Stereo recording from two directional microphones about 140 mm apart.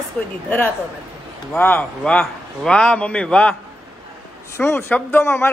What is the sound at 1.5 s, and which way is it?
A man's voice, 10° left (ahead or behind).